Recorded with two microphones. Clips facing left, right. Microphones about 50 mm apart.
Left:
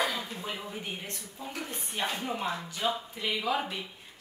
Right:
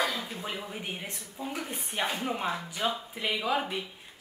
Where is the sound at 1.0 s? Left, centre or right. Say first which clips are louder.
Right 3 dB; centre.